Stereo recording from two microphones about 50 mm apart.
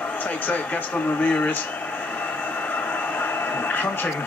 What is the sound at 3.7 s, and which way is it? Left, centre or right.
Speech, left.